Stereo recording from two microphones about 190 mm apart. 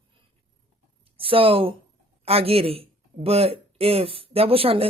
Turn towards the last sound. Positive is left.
turn(degrees=-30)  # may be behind; listen again after turning